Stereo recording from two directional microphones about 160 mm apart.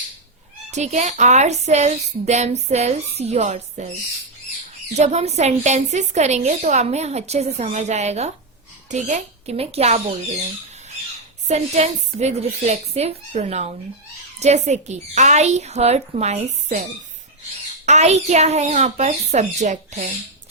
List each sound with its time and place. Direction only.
0.7 s a woman's voice: 45° right (ahead or behind)
4.9 s a woman's voice: 45° right (ahead or behind)
11.4 s a woman's voice: 45° right (ahead or behind)
17.8 s a woman's voice: 45° right (ahead or behind)